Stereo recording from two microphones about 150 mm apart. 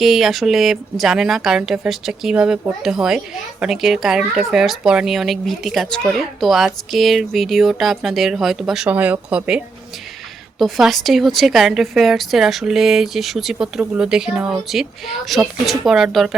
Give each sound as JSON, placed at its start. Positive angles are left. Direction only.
{"t": 0.0, "sound": "speech", "side_deg": 0}
{"t": 10.6, "sound": "speech", "side_deg": 0}